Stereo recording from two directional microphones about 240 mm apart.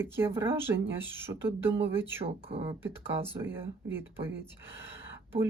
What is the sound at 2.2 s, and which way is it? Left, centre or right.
Speech, right.